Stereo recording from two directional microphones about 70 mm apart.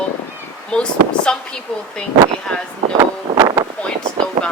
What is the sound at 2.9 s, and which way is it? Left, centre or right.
Wind noise, right.